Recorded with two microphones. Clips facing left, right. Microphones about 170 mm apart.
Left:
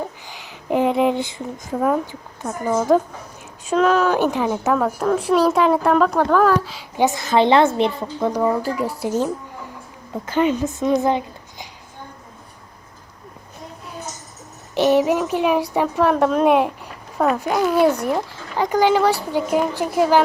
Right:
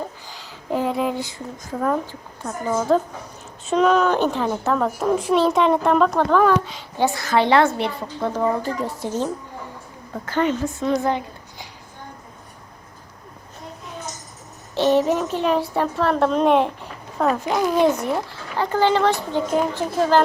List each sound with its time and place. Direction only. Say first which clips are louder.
0.3 s a sound: left 4 dB; 20° left (ahead or behind)
2.4 s a woman's voice: left 2 dB; 10° left (ahead or behind)
6.9 s a woman's voice: left 2 dB; 20° left (ahead or behind)
14.8 s a woman's voice: left 2 dB; 10° left (ahead or behind)